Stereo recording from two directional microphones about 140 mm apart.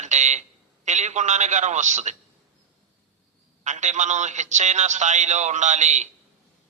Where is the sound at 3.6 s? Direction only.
60° right (ahead or behind).